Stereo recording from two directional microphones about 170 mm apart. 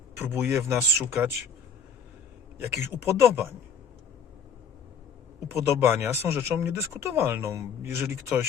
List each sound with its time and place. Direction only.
0.2 s speech: 10° right (ahead or behind)
2.7 s speech: 15° right (ahead or behind)
5.5 s speech: 15° right (ahead or behind)